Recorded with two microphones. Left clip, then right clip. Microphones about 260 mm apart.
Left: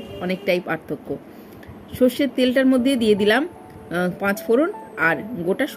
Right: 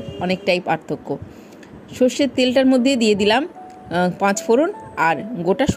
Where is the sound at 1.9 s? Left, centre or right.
Centre.